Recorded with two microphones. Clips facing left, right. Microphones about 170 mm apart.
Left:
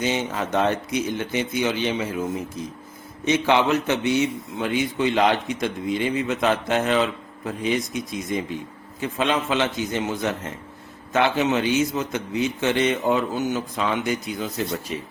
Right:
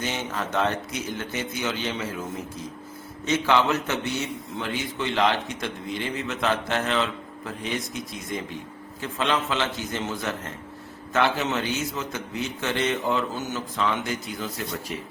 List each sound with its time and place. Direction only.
0.0 s a man's voice: 15° left (ahead or behind)